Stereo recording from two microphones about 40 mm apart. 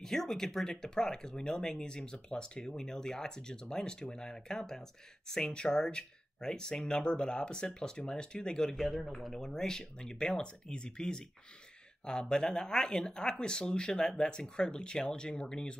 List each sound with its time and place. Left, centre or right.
0.0 s speech: centre